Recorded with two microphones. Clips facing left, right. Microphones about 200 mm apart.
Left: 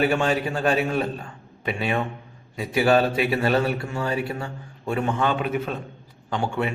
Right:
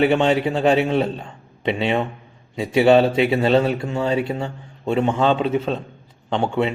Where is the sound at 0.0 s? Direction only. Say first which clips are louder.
Right 5 dB; 25° right (ahead or behind).